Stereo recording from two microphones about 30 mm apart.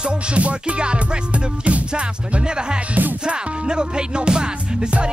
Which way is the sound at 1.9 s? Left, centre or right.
Right.